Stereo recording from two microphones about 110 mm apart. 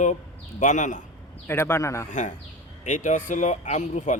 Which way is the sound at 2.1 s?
90° left.